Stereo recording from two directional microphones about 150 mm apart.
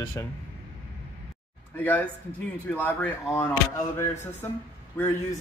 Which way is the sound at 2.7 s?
10° left (ahead or behind).